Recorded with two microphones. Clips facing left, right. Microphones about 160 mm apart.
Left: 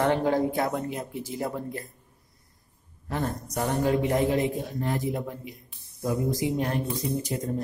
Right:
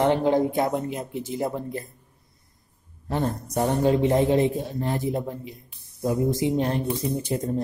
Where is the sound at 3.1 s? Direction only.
30° right (ahead or behind).